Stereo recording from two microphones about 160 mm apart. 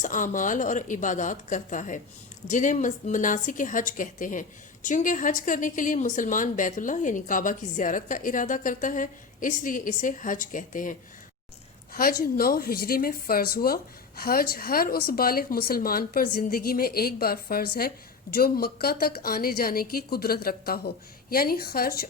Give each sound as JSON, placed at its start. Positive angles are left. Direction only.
{"t": 0.0, "sound": "a woman's voice", "side_deg": 55}
{"t": 11.9, "sound": "a woman's voice", "side_deg": 65}